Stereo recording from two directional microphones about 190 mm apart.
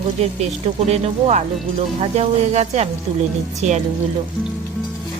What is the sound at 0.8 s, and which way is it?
Speech, 35° right (ahead or behind).